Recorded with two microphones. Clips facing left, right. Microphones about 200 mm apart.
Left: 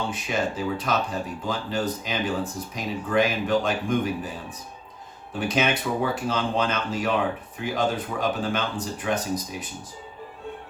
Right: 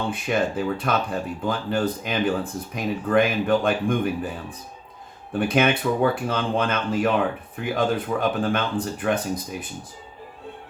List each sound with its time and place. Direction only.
0.1 s speech: 55° right (ahead or behind)